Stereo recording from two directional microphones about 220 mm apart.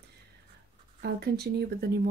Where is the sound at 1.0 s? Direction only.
45° right (ahead or behind).